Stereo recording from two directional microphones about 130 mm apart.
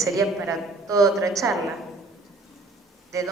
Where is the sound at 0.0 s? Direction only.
25° right (ahead or behind).